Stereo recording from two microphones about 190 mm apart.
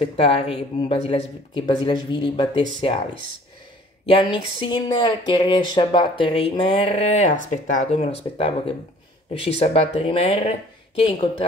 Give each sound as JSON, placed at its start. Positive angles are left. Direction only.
{"t": 0.0, "sound": "speech", "side_deg": 30}
{"t": 4.0, "sound": "speech", "side_deg": 25}